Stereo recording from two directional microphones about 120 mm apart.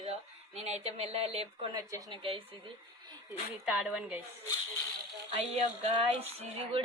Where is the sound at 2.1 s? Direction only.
50° right (ahead or behind).